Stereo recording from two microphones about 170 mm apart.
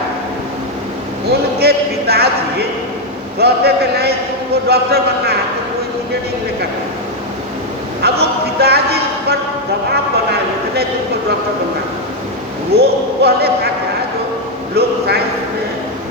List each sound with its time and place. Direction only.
1.3 s a sound: 70° right (ahead or behind)
3.3 s speech: 70° right (ahead or behind)
8.0 s music: 70° right (ahead or behind)
12.7 s speech: 70° right (ahead or behind)
14.8 s speech: 70° right (ahead or behind)